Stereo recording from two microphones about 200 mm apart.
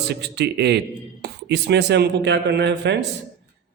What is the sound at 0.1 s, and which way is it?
A man's voice, 55° right (ahead or behind).